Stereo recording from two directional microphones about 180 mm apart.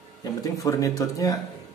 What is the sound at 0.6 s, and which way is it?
Speech, 20° left (ahead or behind).